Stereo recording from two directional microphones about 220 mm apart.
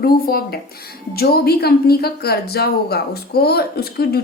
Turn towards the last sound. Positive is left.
turn(degrees=45)  # may be behind; listen again after turning